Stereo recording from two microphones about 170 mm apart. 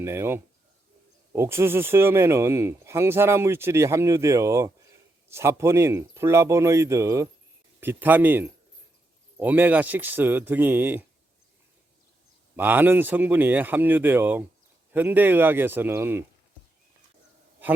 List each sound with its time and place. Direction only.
0.0 s speech: 15° right (ahead or behind)
12.5 s speech: 10° right (ahead or behind)